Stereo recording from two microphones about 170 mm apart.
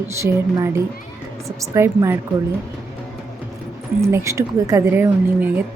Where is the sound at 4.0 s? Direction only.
15° right (ahead or behind).